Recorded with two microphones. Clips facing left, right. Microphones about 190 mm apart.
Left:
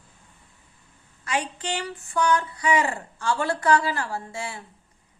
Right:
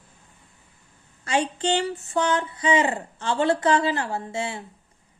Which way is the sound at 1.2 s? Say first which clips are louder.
Right 5 dB; 30° right (ahead or behind).